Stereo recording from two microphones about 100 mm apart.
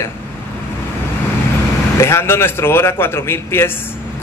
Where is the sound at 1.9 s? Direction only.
25° left (ahead or behind).